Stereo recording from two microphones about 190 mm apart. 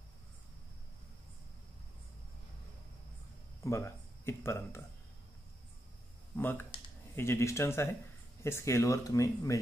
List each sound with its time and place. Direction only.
3.6 s speech: 15° left (ahead or behind)
6.3 s speech: 10° left (ahead or behind)